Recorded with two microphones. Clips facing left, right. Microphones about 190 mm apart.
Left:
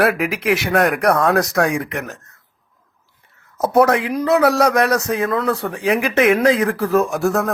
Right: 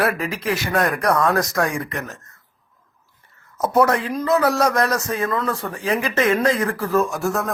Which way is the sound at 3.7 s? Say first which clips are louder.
Left 3 dB; 70° left (ahead or behind).